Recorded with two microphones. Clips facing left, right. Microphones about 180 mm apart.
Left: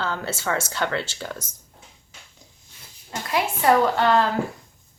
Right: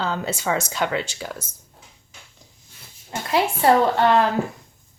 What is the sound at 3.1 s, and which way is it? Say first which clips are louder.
Speech: right 3 dB; 30° right (ahead or behind).